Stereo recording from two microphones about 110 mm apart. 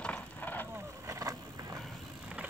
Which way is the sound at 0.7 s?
30° right (ahead or behind).